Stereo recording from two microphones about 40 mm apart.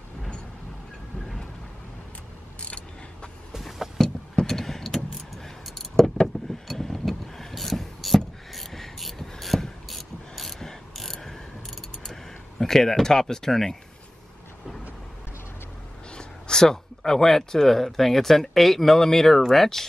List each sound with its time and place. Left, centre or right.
2.6 s mechanisms: left
3.5 s vehicle: centre
4.0 s vehicle: centre
8.5 s mechanisms: centre
12.0 s a sound: centre
16.2 s speech: centre